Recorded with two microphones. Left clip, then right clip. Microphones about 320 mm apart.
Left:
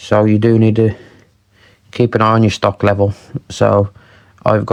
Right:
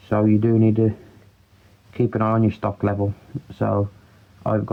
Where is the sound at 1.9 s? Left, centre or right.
Left.